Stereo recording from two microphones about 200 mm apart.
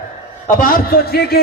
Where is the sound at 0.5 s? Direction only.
45° left (ahead or behind).